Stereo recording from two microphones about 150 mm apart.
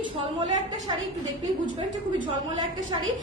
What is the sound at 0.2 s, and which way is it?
Speech, 30° right (ahead or behind).